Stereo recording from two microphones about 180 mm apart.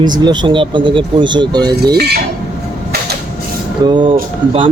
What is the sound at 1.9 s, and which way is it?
Speech, 60° right (ahead or behind).